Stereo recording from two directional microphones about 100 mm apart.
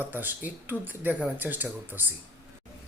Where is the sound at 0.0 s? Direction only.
20° right (ahead or behind).